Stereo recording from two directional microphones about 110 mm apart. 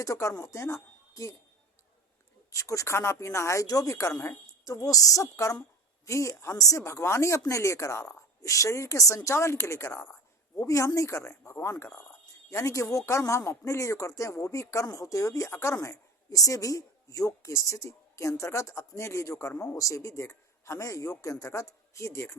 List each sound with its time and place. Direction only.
0.0 s speech: 30° left (ahead or behind)
2.5 s a woman's voice: 30° left (ahead or behind)